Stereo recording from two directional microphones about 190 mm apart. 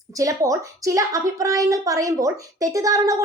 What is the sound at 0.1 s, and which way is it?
A woman's voice, 15° right (ahead or behind).